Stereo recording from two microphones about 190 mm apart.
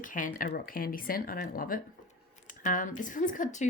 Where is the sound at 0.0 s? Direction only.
45° left (ahead or behind).